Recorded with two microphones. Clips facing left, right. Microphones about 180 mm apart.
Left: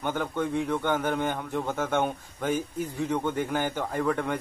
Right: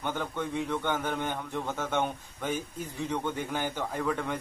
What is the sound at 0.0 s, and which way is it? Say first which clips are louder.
A man's voice: left 4 dB; 10° left (ahead or behind).